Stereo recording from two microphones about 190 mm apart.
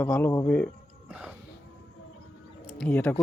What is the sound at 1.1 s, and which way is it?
Music, 5° right (ahead or behind).